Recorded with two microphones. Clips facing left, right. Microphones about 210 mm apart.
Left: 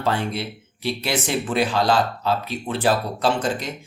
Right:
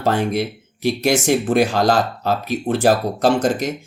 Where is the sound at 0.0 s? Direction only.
45° right (ahead or behind).